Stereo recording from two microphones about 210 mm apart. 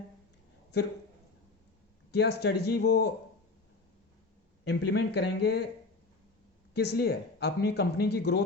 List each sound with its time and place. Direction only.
2.1 s speech: 50° left (ahead or behind)
4.6 s speech: 55° left (ahead or behind)
6.7 s speech: 50° left (ahead or behind)